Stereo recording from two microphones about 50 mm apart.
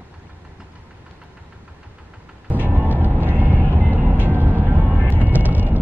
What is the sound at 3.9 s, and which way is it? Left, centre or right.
Vehicle, right.